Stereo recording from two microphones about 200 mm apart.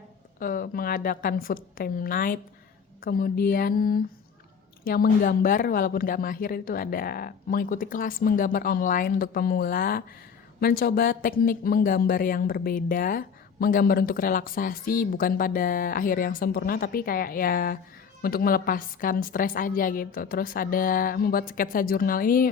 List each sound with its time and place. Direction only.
0.3 s speech: 45° left (ahead or behind)